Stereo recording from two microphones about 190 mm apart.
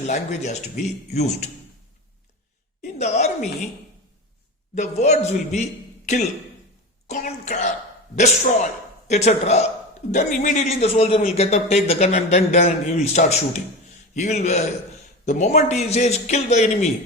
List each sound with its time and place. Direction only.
0.1 s a man's voice: 40° left (ahead or behind)
2.8 s a woman's voice: 40° left (ahead or behind)
4.7 s a man's voice: 35° left (ahead or behind)
7.1 s a man's voice: 40° left (ahead or behind)